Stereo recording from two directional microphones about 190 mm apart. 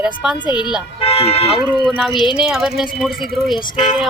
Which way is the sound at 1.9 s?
Centre (ahead or behind).